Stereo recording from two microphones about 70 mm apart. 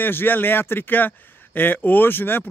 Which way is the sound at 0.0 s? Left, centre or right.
Left.